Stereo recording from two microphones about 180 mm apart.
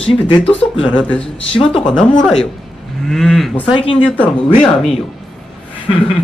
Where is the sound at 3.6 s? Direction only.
30° left (ahead or behind).